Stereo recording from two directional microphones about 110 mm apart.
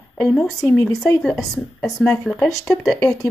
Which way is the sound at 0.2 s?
Centre (ahead or behind).